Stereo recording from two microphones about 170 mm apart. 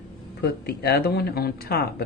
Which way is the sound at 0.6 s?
75° left (ahead or behind).